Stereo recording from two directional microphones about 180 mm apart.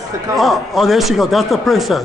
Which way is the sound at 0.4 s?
Centre (ahead or behind).